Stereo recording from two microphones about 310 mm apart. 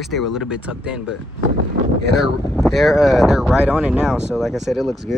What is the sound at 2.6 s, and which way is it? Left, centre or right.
Speech, centre.